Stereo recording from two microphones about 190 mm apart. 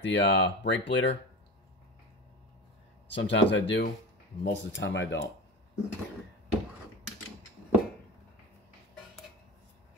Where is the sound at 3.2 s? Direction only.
65° left (ahead or behind).